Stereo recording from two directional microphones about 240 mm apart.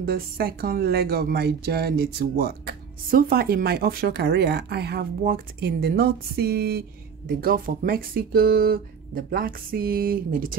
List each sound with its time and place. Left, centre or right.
0.0 s speech: right